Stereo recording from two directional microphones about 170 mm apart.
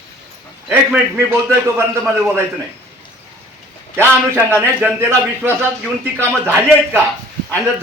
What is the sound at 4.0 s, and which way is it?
Speech, 10° right (ahead or behind).